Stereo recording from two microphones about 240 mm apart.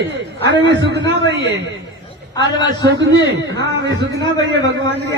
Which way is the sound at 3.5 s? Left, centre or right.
Right.